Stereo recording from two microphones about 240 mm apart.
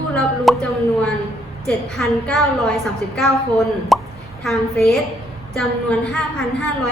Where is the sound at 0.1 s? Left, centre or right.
Centre.